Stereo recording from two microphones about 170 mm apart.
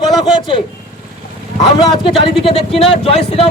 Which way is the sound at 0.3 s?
25° left (ahead or behind).